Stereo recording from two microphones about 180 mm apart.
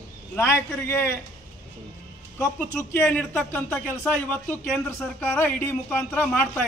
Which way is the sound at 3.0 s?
5° left (ahead or behind).